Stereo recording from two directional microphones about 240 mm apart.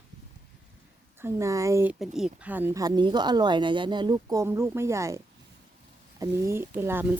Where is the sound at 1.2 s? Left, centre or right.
Centre.